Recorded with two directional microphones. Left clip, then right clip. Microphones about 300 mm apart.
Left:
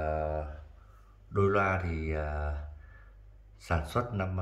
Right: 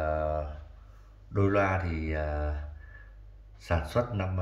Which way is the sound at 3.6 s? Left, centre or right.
Centre.